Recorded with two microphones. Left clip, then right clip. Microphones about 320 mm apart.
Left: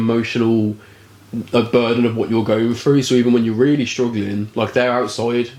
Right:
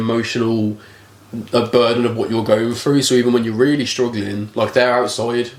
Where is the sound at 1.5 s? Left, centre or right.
Right.